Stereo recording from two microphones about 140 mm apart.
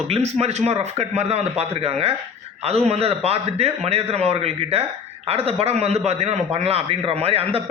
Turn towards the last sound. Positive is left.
turn(degrees=-45)  # may be behind; listen again after turning